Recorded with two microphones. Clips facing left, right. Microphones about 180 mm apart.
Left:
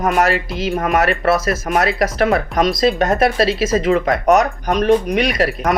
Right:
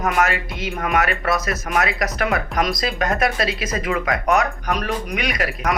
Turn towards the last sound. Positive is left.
turn(degrees=30)  # may be behind; listen again after turning